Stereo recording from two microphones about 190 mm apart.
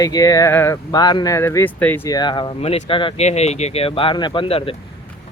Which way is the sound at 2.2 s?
25° left (ahead or behind).